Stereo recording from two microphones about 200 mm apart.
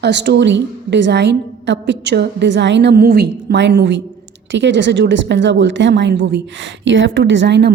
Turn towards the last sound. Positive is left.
turn(degrees=-60)  # may be behind; listen again after turning